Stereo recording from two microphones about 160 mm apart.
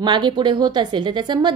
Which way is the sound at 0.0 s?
30° right (ahead or behind).